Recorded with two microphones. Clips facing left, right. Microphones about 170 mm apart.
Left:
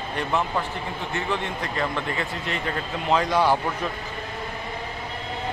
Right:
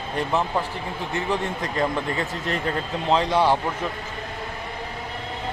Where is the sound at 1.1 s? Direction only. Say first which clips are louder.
Right 3 dB; 35° right (ahead or behind).